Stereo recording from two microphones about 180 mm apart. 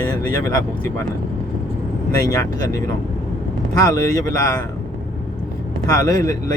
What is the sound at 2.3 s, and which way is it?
Speech, 20° left (ahead or behind).